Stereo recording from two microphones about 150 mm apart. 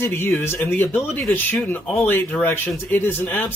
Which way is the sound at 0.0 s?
15° left (ahead or behind).